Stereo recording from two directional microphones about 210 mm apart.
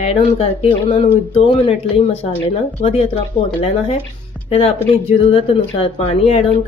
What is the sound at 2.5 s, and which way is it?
Speech, 30° left (ahead or behind).